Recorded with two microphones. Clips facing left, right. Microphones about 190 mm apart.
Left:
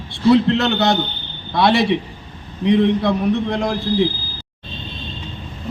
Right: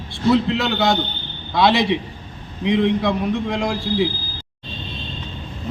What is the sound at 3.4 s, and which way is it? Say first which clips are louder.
Speech: left 2 dB; centre (ahead or behind).